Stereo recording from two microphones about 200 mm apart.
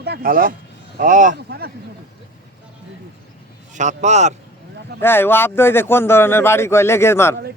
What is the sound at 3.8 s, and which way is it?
Speech, 35° right (ahead or behind).